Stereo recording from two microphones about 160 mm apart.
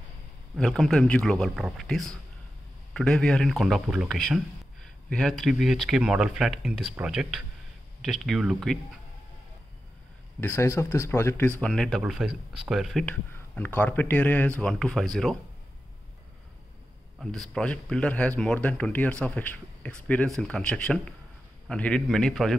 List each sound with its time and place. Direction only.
0.6 s speech: 5° left (ahead or behind)
10.4 s speech: 15° left (ahead or behind)
11.6 s speech: 5° left (ahead or behind)
13.0 s speech: 10° left (ahead or behind)
17.2 s speech: 5° left (ahead or behind)